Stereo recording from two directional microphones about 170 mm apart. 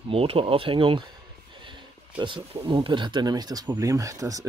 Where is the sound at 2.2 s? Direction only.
30° right (ahead or behind).